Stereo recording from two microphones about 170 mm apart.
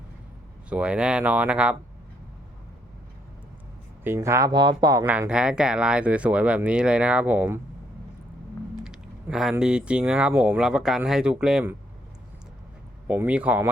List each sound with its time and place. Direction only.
0.7 s speech: 5° right (ahead or behind)
4.0 s speech: 15° right (ahead or behind)
5.0 s speech: 10° right (ahead or behind)
8.8 s speech: 5° right (ahead or behind)
13.1 s speech: 10° right (ahead or behind)